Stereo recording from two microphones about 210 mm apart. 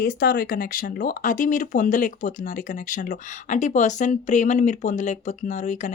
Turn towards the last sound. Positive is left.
turn(degrees=35)  # may be behind; listen again after turning